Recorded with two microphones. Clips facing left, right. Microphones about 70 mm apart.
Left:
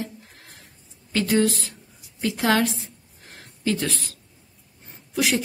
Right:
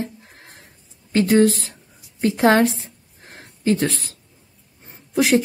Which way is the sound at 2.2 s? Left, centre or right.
Right.